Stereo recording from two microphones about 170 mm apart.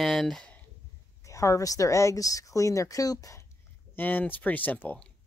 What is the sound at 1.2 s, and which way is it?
Speech, 20° left (ahead or behind).